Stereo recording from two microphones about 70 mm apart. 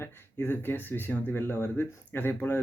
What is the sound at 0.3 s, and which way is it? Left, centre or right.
Speech, left.